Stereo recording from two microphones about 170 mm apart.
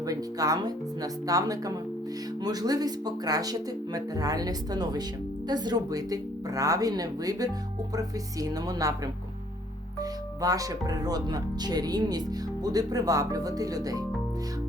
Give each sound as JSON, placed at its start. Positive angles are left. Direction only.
{"t": 0.0, "sound": "speech", "side_deg": -20}
{"t": 10.0, "sound": "speech", "side_deg": -20}